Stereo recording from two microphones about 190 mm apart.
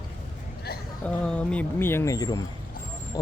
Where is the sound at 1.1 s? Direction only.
5° left (ahead or behind).